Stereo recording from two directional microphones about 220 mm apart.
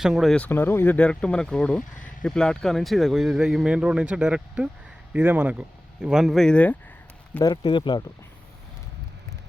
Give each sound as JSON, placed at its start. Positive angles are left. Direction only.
{"t": 0.0, "sound": "speech", "side_deg": 0}
{"t": 7.3, "sound": "speech", "side_deg": 20}